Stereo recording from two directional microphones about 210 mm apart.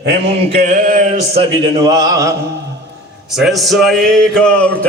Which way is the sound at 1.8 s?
15° right (ahead or behind).